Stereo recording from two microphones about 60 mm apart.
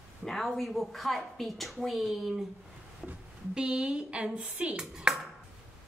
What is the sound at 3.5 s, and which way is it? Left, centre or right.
Speech, centre.